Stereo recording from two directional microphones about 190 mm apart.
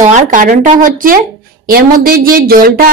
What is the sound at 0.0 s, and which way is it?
Speech, 40° right (ahead or behind).